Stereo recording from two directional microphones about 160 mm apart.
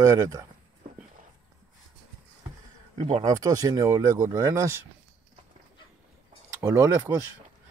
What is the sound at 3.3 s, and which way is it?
Speech, 20° right (ahead or behind).